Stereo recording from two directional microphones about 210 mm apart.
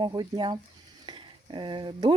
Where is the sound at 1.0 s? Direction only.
20° right (ahead or behind).